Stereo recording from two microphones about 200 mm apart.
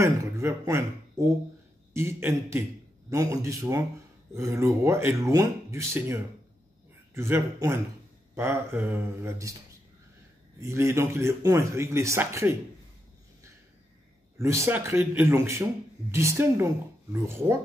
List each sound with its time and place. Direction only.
0.0 s speech: 15° right (ahead or behind)
7.2 s speech: 15° right (ahead or behind)
10.6 s speech: 15° right (ahead or behind)
14.4 s speech: 15° right (ahead or behind)